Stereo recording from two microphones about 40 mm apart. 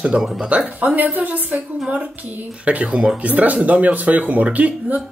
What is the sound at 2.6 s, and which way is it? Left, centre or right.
Speech, right.